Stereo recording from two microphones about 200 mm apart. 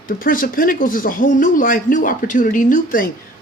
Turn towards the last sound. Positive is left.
turn(degrees=40)  # may be behind; listen again after turning